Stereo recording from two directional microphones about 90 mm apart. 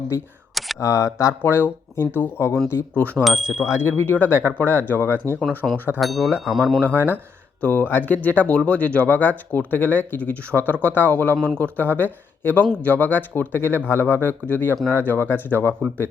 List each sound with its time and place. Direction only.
0.8 s speech: 35° left (ahead or behind)
1.4 s speech: 25° left (ahead or behind)
3.2 s speech: 5° right (ahead or behind)
3.7 s speech: 25° left (ahead or behind)
5.6 s speech: 10° left (ahead or behind)
6.0 s speech: centre (ahead or behind)
6.8 s speech: 20° left (ahead or behind)